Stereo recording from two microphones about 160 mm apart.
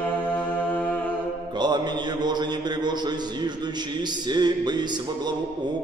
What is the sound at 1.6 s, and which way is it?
Mantra, 25° right (ahead or behind).